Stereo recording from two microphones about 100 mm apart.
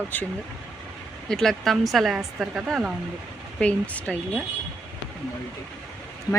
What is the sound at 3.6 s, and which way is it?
Speech, 15° left (ahead or behind).